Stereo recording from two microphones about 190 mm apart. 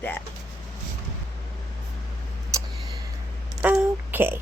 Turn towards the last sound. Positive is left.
turn(degrees=-10)  # may be behind; listen again after turning